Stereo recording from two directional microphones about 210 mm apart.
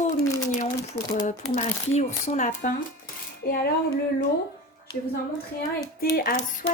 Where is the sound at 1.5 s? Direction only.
35° left (ahead or behind).